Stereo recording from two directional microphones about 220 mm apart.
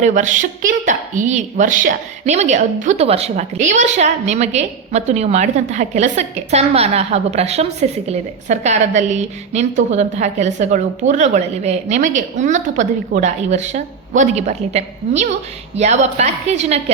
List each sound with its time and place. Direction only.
0.0 s a woman's voice: 35° right (ahead or behind)